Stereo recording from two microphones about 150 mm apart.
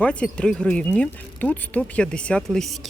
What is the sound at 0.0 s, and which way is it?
Speech, 10° left (ahead or behind).